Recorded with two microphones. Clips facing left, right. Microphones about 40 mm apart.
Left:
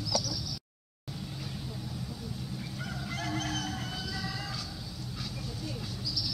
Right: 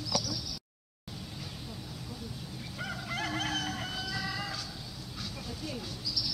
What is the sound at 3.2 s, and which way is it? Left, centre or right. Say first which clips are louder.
Fowl: right 1 dB; right.